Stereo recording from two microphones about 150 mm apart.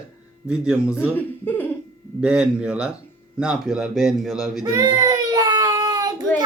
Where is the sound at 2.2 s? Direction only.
5° right (ahead or behind).